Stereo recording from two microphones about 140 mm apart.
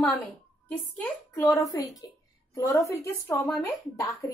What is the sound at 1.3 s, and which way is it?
Speech, 20° left (ahead or behind).